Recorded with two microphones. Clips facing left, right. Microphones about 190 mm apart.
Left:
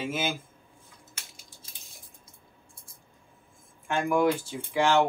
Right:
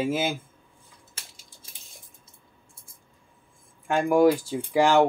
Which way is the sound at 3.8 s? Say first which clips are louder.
Right 5 dB; 35° right (ahead or behind).